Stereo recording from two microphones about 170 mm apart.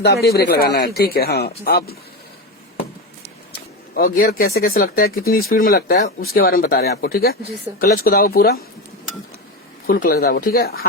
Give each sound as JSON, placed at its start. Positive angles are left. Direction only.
{"t": 0.0, "sound": "speech", "side_deg": 70}
{"t": 3.5, "sound": "speech", "side_deg": 60}
{"t": 9.8, "sound": "speech", "side_deg": 60}